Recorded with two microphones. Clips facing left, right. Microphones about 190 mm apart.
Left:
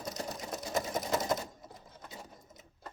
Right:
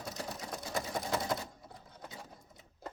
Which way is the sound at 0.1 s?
20° left (ahead or behind).